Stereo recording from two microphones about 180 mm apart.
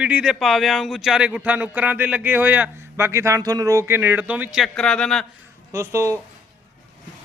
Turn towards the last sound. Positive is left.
turn(degrees=-15)  # may be behind; listen again after turning